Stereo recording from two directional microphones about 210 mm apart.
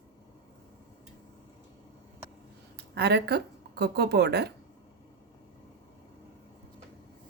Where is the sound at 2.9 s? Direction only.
50° right (ahead or behind).